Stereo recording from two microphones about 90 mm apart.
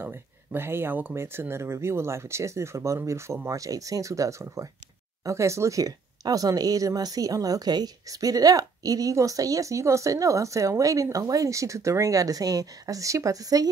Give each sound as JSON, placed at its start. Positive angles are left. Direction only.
{"t": 0.0, "sound": "speech", "side_deg": -25}